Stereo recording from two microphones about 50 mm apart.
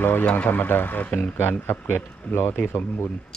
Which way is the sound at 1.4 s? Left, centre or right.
Left.